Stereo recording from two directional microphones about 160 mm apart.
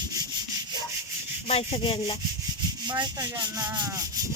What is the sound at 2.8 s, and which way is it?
Rub, 25° right (ahead or behind).